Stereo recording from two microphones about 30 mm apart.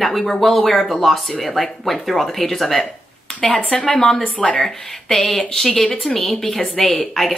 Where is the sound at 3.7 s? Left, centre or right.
Left.